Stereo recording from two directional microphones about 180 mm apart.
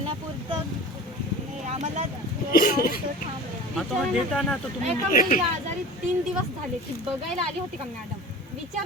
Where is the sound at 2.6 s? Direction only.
55° left (ahead or behind).